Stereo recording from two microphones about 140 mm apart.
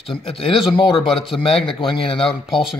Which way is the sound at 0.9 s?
Centre (ahead or behind).